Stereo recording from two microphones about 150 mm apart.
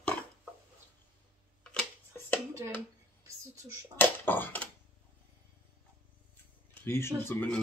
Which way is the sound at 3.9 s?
15° left (ahead or behind).